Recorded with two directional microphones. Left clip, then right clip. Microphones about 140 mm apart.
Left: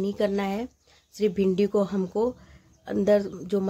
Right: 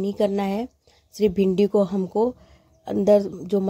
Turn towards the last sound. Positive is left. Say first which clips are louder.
# right 4 dB
turn(degrees=-20)  # may be behind; listen again after turning